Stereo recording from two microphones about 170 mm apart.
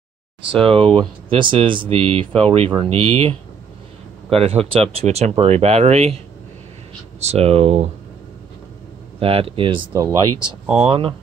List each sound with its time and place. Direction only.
0.5 s speech: 30° right (ahead or behind)
9.2 s speech: 35° right (ahead or behind)
9.9 s speech: 20° right (ahead or behind)
10.8 s speech: 30° right (ahead or behind)